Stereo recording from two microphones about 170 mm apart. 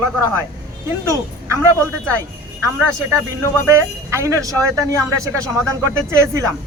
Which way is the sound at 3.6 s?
15° right (ahead or behind).